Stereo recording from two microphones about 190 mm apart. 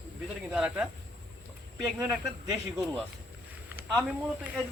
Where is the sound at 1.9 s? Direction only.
20° right (ahead or behind).